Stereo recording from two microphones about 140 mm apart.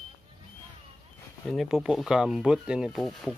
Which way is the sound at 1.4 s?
Centre (ahead or behind).